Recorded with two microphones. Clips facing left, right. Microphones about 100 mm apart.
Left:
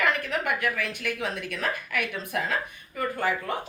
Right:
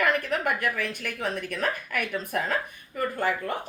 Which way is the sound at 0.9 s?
45° right (ahead or behind).